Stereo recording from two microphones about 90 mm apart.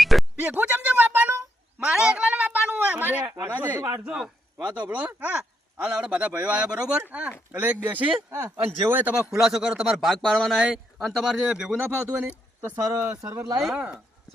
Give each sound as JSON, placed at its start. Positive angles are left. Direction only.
{"t": 0.0, "sound": "a sound", "side_deg": 0}
{"t": 0.4, "sound": "a sound", "side_deg": -20}
{"t": 1.8, "sound": "a sound", "side_deg": -10}
{"t": 3.5, "sound": "speech", "side_deg": -20}
{"t": 4.0, "sound": "speech", "side_deg": -10}
{"t": 8.3, "sound": "speech", "side_deg": -30}
{"t": 9.1, "sound": "speech", "side_deg": -5}
{"t": 11.8, "sound": "speech", "side_deg": -20}
{"t": 13.6, "sound": "speech", "side_deg": -5}